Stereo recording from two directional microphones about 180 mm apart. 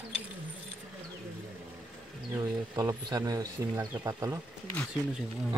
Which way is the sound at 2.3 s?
20° right (ahead or behind).